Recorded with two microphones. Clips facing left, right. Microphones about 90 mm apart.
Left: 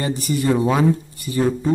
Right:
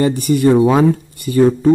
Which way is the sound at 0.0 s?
55° right (ahead or behind).